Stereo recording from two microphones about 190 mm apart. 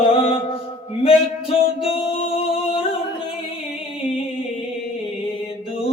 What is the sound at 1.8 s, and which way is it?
Music, 30° left (ahead or behind).